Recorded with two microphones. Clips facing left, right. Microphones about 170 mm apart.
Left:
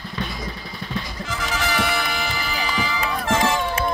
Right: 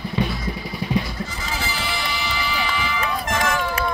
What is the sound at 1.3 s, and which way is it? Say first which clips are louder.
Music: left 4 dB; 85° left.